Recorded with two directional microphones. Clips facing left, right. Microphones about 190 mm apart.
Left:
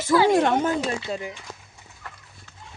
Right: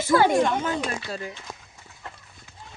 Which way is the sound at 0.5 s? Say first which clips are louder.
Left 4 dB; 40° left (ahead or behind).